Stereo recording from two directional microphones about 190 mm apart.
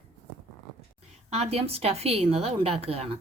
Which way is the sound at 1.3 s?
35° right (ahead or behind).